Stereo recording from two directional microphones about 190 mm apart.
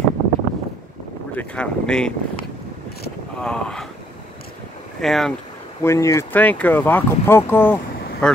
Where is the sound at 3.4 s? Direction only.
5° left (ahead or behind).